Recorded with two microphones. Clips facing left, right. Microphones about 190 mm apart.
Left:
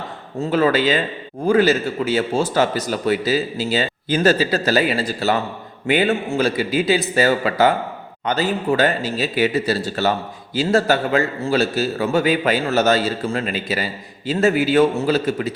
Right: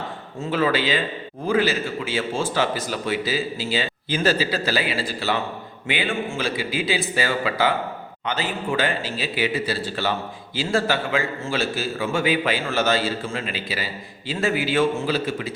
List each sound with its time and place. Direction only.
0.5 s a man's voice: 45° left (ahead or behind)